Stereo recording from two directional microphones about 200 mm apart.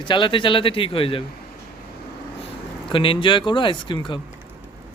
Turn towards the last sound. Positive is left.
turn(degrees=25)  # may be behind; listen again after turning